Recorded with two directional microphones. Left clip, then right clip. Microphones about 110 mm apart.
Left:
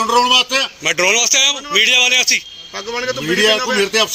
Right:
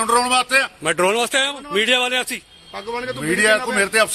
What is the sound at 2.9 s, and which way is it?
A man's voice, 30° right (ahead or behind).